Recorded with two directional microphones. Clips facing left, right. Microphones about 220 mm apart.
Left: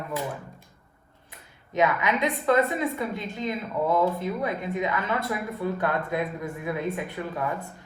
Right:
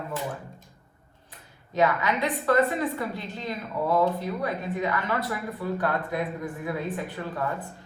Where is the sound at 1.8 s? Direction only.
20° left (ahead or behind).